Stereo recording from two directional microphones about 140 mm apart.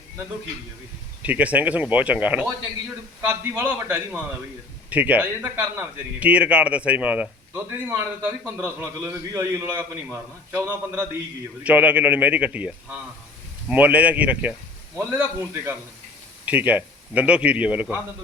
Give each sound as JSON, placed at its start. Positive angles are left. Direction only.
{"t": 1.2, "sound": "a man's voice", "side_deg": -10}